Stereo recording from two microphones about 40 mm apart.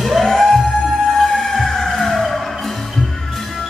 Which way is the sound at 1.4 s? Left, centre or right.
Centre.